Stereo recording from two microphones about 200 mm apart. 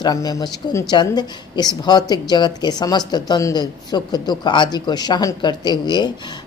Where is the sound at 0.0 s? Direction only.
20° left (ahead or behind).